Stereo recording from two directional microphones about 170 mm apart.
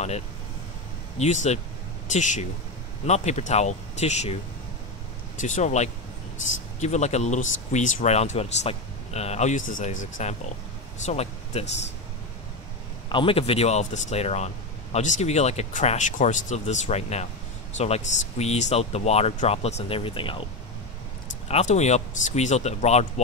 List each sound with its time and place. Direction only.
1.1 s speech: 45° left (ahead or behind)
5.4 s speech: 45° left (ahead or behind)
13.1 s speech: 30° left (ahead or behind)
21.5 s speech: 40° left (ahead or behind)